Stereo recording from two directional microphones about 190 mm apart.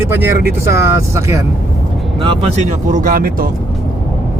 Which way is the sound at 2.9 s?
45° right (ahead or behind).